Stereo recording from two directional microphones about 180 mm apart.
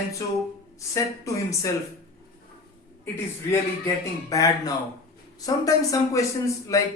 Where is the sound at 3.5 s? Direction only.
20° left (ahead or behind).